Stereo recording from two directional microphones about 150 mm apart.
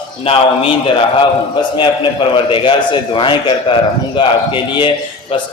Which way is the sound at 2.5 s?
35° left (ahead or behind).